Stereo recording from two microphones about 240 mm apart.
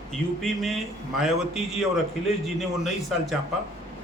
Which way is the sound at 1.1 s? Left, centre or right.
Centre.